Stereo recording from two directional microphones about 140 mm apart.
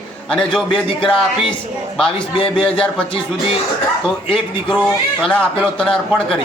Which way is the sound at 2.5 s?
5° left (ahead or behind).